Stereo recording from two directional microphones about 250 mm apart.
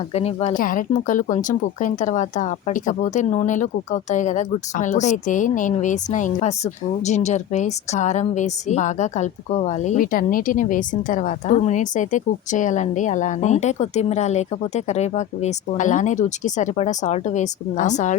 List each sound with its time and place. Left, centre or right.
0.1 s a woman's voice: left